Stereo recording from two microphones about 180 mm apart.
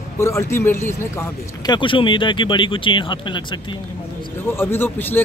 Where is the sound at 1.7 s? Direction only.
25° left (ahead or behind).